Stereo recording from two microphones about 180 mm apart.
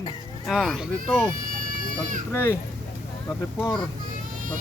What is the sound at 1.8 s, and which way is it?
Goat, 45° right (ahead or behind).